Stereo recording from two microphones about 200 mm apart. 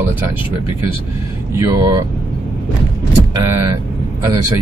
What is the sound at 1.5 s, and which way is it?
Speech, 15° right (ahead or behind).